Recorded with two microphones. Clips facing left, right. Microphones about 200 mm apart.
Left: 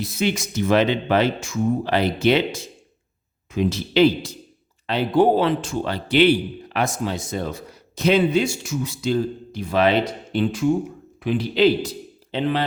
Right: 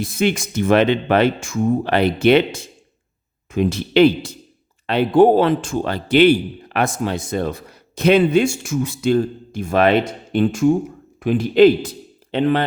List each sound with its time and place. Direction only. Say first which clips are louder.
0.0 s speech: right 4 dB; 50° right (ahead or behind)
3.5 s a man's voice: right 4 dB; 55° right (ahead or behind)